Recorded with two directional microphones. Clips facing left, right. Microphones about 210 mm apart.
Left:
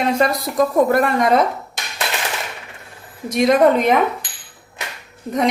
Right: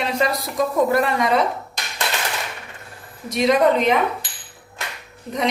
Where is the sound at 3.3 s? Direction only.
50° left (ahead or behind).